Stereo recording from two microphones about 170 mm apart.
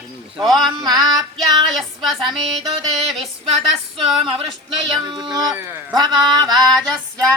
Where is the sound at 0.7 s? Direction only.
25° right (ahead or behind).